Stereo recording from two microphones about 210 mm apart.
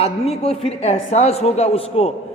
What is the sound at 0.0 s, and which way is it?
A man's voice, 30° left (ahead or behind).